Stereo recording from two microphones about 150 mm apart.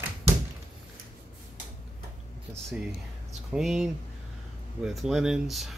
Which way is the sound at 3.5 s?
5° right (ahead or behind).